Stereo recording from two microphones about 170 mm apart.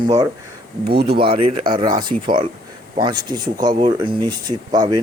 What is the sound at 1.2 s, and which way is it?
Speech, 30° right (ahead or behind).